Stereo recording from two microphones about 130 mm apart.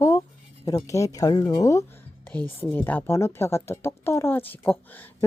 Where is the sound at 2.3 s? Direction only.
15° left (ahead or behind).